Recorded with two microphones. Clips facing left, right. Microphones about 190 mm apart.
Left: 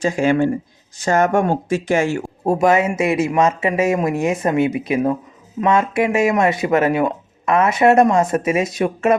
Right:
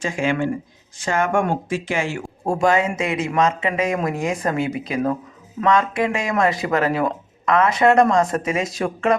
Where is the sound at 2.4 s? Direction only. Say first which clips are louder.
Left 3 dB; 20° left (ahead or behind).